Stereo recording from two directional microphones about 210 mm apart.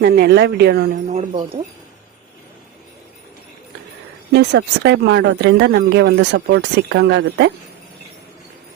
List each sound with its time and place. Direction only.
0.0 s speech: 50° right (ahead or behind)
1.1 s speech: 25° right (ahead or behind)
4.3 s speech: 55° right (ahead or behind)